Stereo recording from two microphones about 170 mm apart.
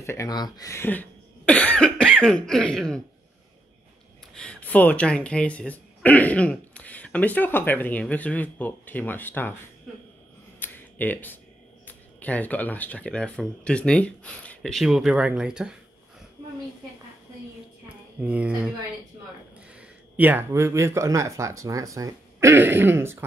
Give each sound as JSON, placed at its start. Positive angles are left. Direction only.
{"t": 0.0, "sound": "speech", "side_deg": 15}
{"t": 4.4, "sound": "speech", "side_deg": 5}
{"t": 10.6, "sound": "a sound", "side_deg": 10}
{"t": 11.8, "sound": "speech", "side_deg": 10}
{"t": 17.8, "sound": "a sound", "side_deg": -10}
{"t": 19.7, "sound": "speech", "side_deg": -10}